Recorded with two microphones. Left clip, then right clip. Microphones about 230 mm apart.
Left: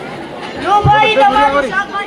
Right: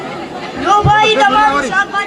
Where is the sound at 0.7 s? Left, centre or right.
Right.